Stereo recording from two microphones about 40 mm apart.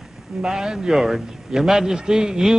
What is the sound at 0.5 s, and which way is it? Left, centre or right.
A man's voice, centre.